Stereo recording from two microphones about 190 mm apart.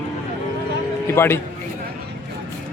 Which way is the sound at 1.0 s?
10° left (ahead or behind).